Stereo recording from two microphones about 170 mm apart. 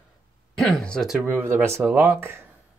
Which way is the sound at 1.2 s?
15° right (ahead or behind).